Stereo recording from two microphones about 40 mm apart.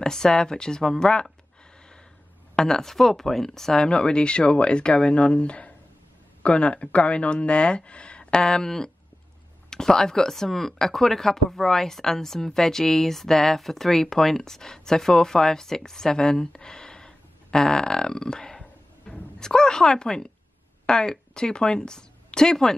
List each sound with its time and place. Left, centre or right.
0.0 s speech: centre
2.5 s speech: centre
3.9 s a woman's voice: left